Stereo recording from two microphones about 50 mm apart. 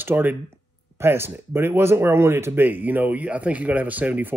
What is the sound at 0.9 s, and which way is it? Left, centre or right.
Speech, right.